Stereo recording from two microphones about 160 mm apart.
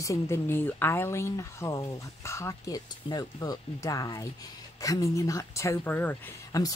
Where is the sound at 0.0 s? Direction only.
20° left (ahead or behind).